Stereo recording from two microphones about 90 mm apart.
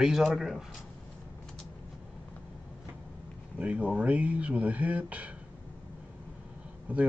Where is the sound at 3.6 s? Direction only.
15° right (ahead or behind).